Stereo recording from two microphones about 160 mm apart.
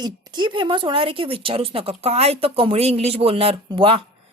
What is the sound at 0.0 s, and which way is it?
Speech, 30° right (ahead or behind).